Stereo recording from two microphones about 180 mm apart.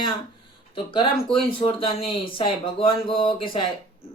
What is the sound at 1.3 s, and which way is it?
Speech, 30° left (ahead or behind).